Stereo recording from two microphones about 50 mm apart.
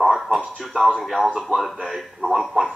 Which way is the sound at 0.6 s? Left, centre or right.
Centre.